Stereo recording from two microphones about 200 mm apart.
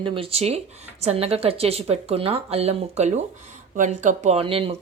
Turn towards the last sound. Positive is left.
turn(degrees=-25)  # may be behind; listen again after turning